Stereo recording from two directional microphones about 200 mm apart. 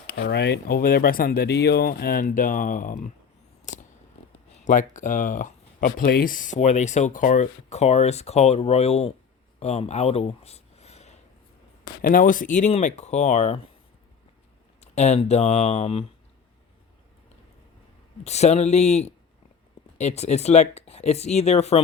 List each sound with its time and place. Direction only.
0.1 s speech: 55° left (ahead or behind)
3.7 s scissors: 40° left (ahead or behind)
4.6 s speech: 40° left (ahead or behind)
9.6 s a sound: 30° left (ahead or behind)
12.0 s speech: 45° left (ahead or behind)
14.8 s speech: 35° left (ahead or behind)
18.2 s speech: 35° left (ahead or behind)